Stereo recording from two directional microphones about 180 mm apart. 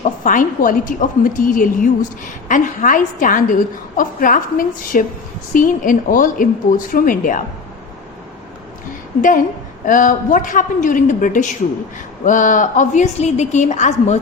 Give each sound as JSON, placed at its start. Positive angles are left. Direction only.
{"t": 0.0, "sound": "a woman's voice", "side_deg": 45}
{"t": 9.8, "sound": "a woman's voice", "side_deg": 45}